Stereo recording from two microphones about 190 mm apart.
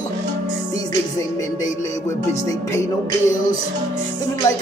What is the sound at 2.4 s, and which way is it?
Speech, 15° left (ahead or behind).